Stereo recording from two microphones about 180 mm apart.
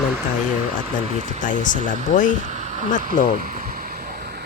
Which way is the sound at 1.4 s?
45° left (ahead or behind).